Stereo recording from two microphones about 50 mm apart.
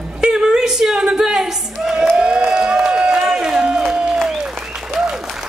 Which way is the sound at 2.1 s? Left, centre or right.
Centre.